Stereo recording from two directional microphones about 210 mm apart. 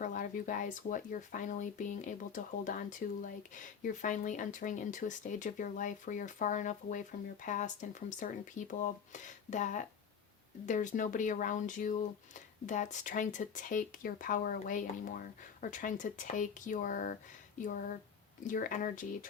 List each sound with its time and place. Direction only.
0.0 s speech: 40° left (ahead or behind)
18.4 s speech: 40° left (ahead or behind)